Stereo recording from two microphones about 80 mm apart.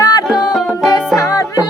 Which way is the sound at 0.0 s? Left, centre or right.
Left.